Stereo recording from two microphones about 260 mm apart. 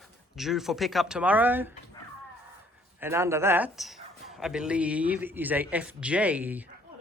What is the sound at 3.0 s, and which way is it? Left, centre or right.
Speech, centre.